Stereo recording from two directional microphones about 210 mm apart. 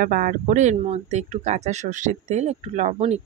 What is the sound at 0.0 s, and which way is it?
Speech, 40° right (ahead or behind).